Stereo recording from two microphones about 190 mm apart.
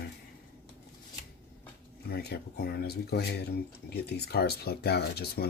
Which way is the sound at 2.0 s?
60° left (ahead or behind).